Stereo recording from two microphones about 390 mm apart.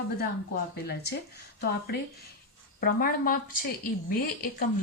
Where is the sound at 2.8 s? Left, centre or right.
Left.